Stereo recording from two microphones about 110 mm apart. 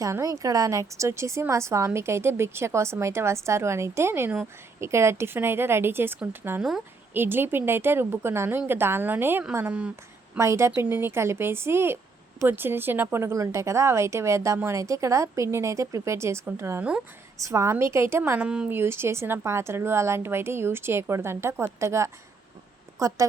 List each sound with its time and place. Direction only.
0.0 s a woman's voice: 30° right (ahead or behind)
6.6 s speech: 5° right (ahead or behind)
7.1 s a woman's voice: 20° right (ahead or behind)
10.3 s a woman's voice: 25° right (ahead or behind)
18.3 s speech: 10° right (ahead or behind)
18.7 s a woman's voice: 20° right (ahead or behind)